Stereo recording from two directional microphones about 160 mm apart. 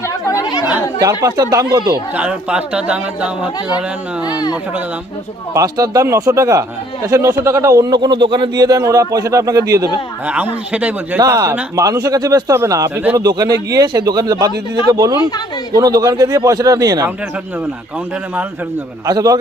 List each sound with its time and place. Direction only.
0.3 s chatter: 25° left (ahead or behind)
0.6 s speech: 20° right (ahead or behind)
2.1 s speech: 5° right (ahead or behind)
4.3 s speech: 25° left (ahead or behind)
5.5 s speech: 20° right (ahead or behind)
10.2 s speech: 10° right (ahead or behind)
11.2 s speech: 20° right (ahead or behind)
19.0 s speech: 20° right (ahead or behind)